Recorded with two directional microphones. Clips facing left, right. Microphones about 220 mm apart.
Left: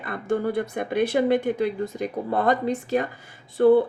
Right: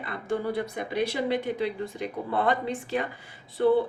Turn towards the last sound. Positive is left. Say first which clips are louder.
# left 6 dB
turn(degrees=50)  # may be behind; listen again after turning